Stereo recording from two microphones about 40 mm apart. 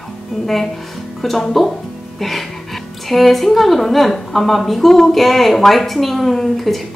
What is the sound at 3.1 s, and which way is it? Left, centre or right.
A woman's voice, centre.